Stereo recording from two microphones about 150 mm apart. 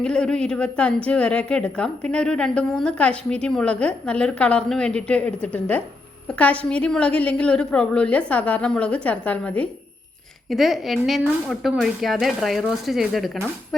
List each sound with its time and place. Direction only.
0.0 s a woman's voice: 5° left (ahead or behind)